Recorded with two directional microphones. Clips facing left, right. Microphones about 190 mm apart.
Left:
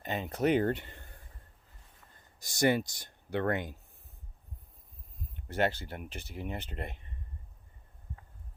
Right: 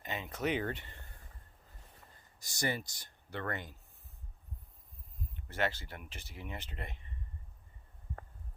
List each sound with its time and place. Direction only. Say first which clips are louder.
0.0 s speech: left 6 dB; 40° left (ahead or behind)
2.6 s speech: left 9 dB; 65° left (ahead or behind)
5.5 s speech: left 5 dB; 55° left (ahead or behind)